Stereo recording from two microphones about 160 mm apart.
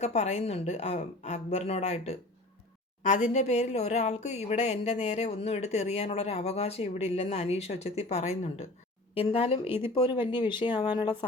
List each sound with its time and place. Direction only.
0.0 s a woman's voice: 40° left (ahead or behind)
9.1 s a woman's voice: 35° left (ahead or behind)
9.6 s speech: 15° right (ahead or behind)
9.9 s speech: 30° left (ahead or behind)